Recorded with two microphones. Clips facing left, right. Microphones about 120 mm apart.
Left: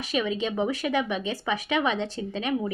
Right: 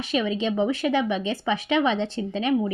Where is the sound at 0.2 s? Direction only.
30° right (ahead or behind).